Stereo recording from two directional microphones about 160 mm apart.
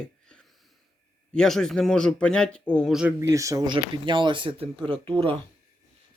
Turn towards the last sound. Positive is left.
turn(degrees=-35)  # may be behind; listen again after turning